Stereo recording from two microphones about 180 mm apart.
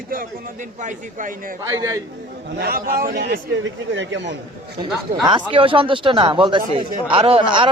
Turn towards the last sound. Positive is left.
turn(degrees=-25)  # may be behind; listen again after turning